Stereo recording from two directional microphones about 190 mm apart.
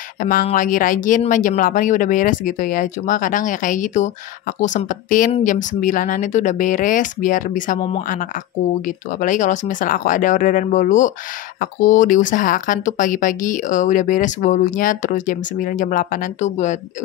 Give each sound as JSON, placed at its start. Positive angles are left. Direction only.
{"t": 0.2, "sound": "speech", "side_deg": 45}